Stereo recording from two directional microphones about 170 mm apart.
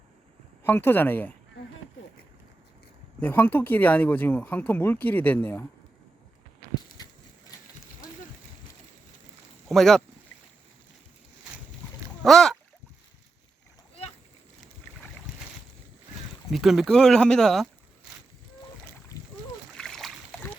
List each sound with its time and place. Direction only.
0.6 s speech: 10° left (ahead or behind)
3.2 s speech: 10° left (ahead or behind)
6.9 s a sound: 25° left (ahead or behind)
9.6 s speech: centre (ahead or behind)
12.2 s speech: centre (ahead or behind)
16.5 s speech: centre (ahead or behind)
19.7 s splash: centre (ahead or behind)